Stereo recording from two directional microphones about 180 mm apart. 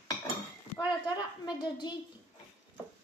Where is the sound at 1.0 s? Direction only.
25° left (ahead or behind).